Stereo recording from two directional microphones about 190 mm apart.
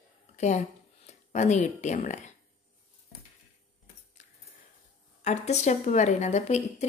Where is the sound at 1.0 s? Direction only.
35° left (ahead or behind).